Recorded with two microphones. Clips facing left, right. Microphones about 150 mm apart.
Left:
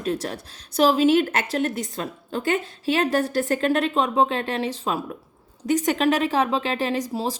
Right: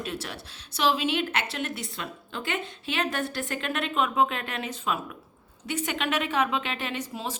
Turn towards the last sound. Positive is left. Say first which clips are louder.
# left 8 dB
turn(degrees=35)  # may be behind; listen again after turning